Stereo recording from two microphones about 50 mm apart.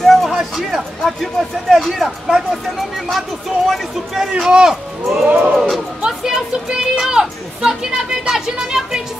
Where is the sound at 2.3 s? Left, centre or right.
Centre.